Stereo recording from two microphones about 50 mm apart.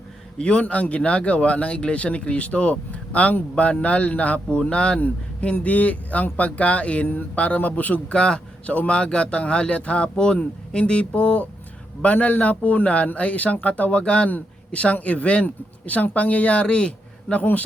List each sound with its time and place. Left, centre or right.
0.3 s a man's voice: left
4.9 s a man's voice: left
8.1 s a man's voice: centre
14.0 s speech: centre
14.3 s speech: left